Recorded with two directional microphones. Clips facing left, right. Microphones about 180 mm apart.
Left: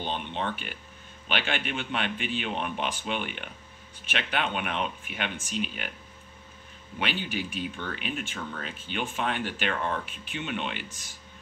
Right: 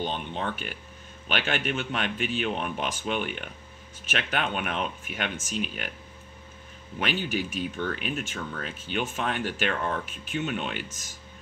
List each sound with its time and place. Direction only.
0.1 s speech: 40° right (ahead or behind)
7.0 s speech: 45° right (ahead or behind)